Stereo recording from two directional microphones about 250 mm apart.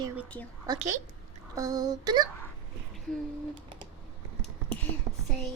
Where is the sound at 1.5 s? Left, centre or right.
Centre.